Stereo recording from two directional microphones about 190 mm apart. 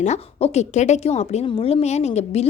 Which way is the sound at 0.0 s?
35° left (ahead or behind).